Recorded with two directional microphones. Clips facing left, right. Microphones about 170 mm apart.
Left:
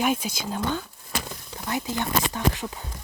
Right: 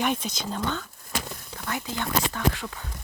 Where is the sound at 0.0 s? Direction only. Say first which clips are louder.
Left 2 dB; 5° left (ahead or behind).